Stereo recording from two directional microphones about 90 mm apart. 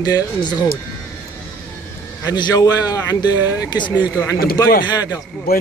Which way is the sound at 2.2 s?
45° left (ahead or behind).